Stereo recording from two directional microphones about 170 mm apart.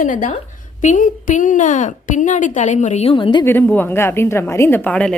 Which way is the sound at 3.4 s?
10° left (ahead or behind).